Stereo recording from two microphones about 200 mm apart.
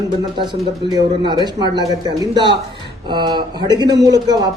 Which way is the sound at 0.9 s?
20° right (ahead or behind).